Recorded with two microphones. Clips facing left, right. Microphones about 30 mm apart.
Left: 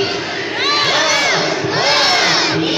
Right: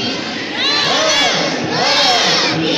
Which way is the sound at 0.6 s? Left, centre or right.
Centre.